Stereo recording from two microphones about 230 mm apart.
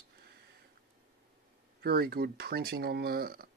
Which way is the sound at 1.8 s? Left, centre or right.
Right.